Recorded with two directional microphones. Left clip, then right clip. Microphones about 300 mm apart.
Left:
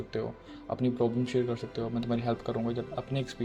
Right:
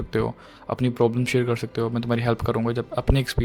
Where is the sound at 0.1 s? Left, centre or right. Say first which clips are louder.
Right 11 dB; right.